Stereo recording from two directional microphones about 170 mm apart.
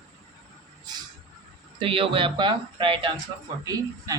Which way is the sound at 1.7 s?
30° right (ahead or behind).